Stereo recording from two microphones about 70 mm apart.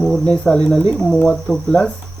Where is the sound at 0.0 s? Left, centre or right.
Centre.